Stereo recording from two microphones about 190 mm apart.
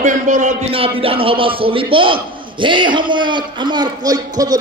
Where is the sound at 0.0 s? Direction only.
40° right (ahead or behind).